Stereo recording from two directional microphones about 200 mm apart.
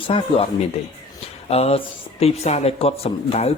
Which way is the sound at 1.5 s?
30° left (ahead or behind).